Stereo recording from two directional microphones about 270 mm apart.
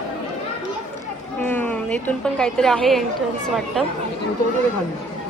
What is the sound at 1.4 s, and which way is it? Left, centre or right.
A woman's voice, centre.